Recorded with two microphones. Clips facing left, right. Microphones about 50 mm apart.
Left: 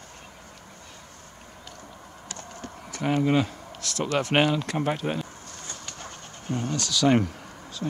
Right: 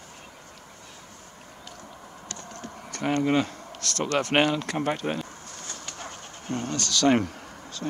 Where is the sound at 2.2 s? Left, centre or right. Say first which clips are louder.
Even; centre.